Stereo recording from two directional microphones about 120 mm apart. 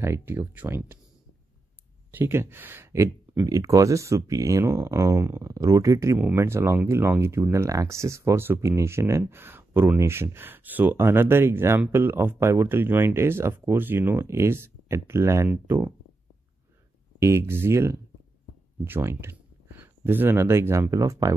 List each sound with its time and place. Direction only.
0.0 s speech: 20° right (ahead or behind)
2.0 s speech: 20° right (ahead or behind)
17.2 s speech: 20° right (ahead or behind)